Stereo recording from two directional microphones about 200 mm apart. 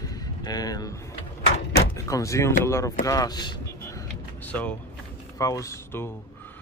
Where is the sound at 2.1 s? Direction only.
15° left (ahead or behind).